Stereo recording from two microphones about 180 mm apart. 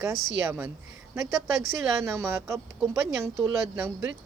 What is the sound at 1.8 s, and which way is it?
Speech, 15° right (ahead or behind).